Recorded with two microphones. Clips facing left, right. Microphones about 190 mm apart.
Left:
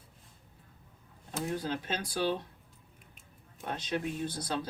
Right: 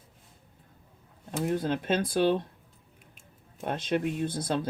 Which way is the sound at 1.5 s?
55° right (ahead or behind).